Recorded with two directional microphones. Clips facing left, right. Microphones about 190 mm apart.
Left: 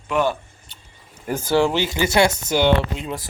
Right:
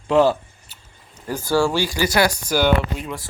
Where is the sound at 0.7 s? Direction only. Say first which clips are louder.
Left 1 dB; 5° right (ahead or behind).